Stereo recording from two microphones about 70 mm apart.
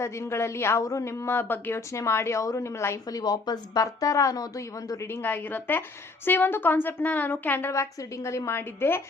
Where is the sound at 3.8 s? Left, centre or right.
Left.